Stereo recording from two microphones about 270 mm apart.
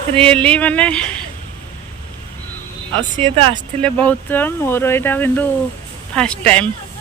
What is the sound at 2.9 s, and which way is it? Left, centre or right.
Speech, centre.